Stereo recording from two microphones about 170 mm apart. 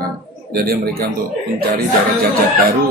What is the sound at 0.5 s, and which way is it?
Speech, 60° right (ahead or behind).